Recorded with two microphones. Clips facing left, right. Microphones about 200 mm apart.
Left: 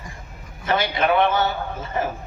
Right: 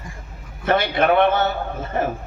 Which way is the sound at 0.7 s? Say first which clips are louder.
Right 3 dB; 55° right (ahead or behind).